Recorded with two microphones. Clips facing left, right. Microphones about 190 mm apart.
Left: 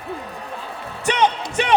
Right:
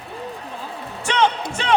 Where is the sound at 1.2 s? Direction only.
15° left (ahead or behind).